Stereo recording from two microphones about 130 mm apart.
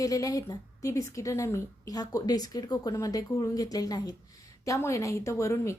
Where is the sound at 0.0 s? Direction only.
25° left (ahead or behind).